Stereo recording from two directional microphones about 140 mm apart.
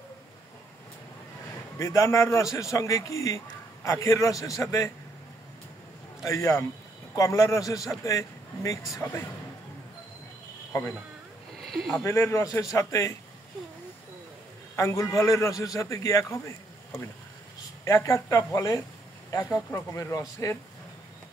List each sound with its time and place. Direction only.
1.8 s a man's voice: 20° left (ahead or behind)
6.2 s a man's voice: 25° left (ahead or behind)
11.6 s a sound: centre (ahead or behind)
12.0 s a man's voice: 20° left (ahead or behind)
14.8 s a man's voice: 20° left (ahead or behind)